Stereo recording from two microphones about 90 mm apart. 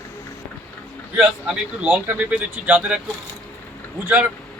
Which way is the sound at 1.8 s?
20° right (ahead or behind).